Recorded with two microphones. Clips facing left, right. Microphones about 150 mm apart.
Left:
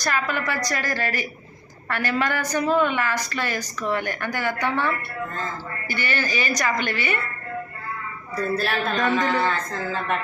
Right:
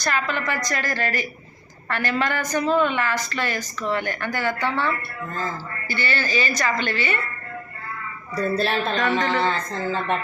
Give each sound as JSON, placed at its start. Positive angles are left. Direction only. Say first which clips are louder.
{"t": 0.0, "sound": "a woman's voice", "louder": "even", "side_deg": 10}
{"t": 5.9, "sound": "a woman's voice", "louder": "right 1 dB", "side_deg": 15}
{"t": 8.5, "sound": "speech", "louder": "right 1 dB", "side_deg": -25}